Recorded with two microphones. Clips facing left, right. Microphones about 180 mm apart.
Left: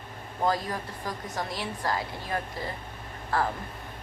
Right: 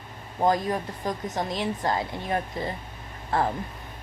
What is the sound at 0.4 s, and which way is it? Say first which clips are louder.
A woman's voice: right 4 dB; 20° right (ahead or behind).